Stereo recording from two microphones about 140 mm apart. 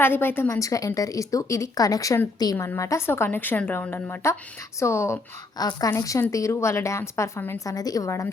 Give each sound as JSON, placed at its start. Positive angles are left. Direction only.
{"t": 0.0, "sound": "a woman's voice", "side_deg": 15}